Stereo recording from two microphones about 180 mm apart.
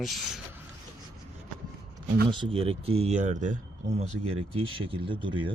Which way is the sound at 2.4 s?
30° right (ahead or behind).